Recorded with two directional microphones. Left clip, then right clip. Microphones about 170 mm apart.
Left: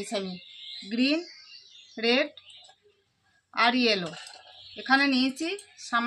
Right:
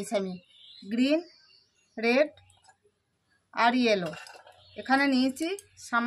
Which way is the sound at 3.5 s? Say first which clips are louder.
Left 1 dB; 25° right (ahead or behind).